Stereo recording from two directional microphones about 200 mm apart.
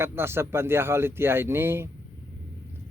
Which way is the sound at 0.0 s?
10° right (ahead or behind).